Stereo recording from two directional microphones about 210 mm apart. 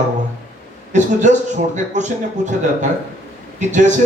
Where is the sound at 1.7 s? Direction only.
35° right (ahead or behind).